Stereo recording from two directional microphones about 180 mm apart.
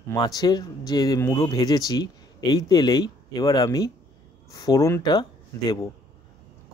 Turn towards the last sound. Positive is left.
turn(degrees=20)  # may be behind; listen again after turning